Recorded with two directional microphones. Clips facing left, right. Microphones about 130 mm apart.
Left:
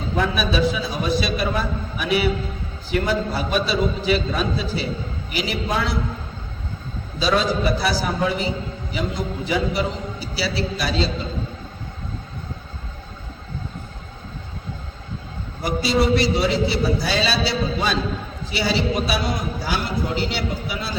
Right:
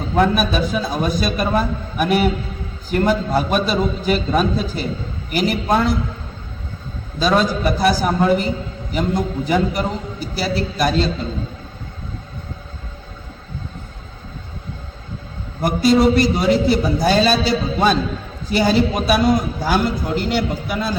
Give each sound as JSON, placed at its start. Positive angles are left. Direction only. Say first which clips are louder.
{"t": 0.2, "sound": "a man's voice", "louder": "right 4 dB", "side_deg": -45}
{"t": 7.2, "sound": "a man's voice", "louder": "right 3 dB", "side_deg": -50}
{"t": 15.6, "sound": "a man's voice", "louder": "right 6 dB", "side_deg": -50}